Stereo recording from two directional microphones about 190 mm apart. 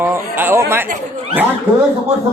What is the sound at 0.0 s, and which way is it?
Chatter, 10° right (ahead or behind).